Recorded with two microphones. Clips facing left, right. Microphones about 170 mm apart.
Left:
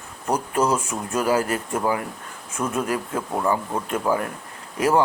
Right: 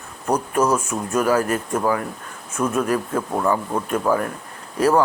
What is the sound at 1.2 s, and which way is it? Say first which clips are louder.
Speech: right 2 dB; 25° left (ahead or behind).